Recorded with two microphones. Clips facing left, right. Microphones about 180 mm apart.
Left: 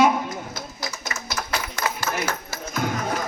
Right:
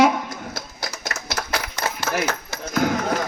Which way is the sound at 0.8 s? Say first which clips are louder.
Right 2 dB; 65° right (ahead or behind).